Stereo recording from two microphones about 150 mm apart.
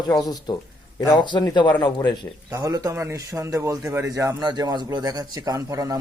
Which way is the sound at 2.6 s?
25° right (ahead or behind).